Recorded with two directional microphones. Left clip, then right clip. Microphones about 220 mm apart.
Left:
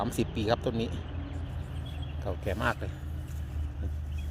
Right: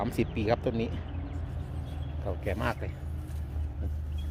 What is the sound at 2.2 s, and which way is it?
Speech, 5° left (ahead or behind).